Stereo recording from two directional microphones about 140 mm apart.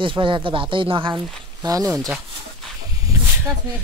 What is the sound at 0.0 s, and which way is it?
Speech, 35° right (ahead or behind).